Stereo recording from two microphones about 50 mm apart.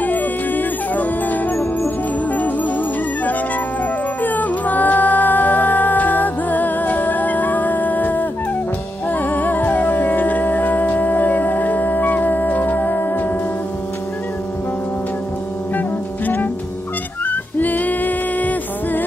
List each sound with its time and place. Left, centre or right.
0.0 s music: left
4.2 s music: left
17.3 s music: left